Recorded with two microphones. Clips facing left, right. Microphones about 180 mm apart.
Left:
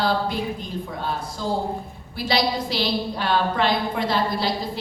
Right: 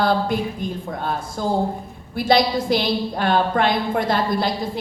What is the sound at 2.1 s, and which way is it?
A woman's voice, 50° right (ahead or behind).